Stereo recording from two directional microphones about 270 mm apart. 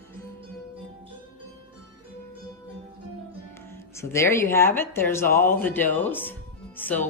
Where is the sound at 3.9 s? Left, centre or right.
Centre.